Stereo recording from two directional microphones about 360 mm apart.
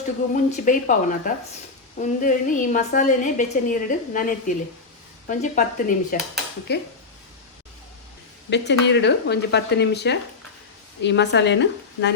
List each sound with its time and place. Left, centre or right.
0.5 s a woman's voice: left
8.4 s a woman's voice: left